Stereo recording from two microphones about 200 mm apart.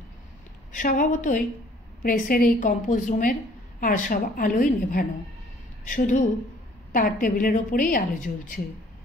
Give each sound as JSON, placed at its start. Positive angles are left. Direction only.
{"t": 0.7, "sound": "a woman's voice", "side_deg": 40}